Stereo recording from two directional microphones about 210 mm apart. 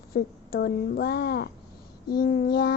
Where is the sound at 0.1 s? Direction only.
45° left (ahead or behind).